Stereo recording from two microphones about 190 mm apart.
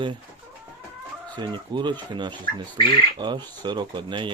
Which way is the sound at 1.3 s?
25° right (ahead or behind).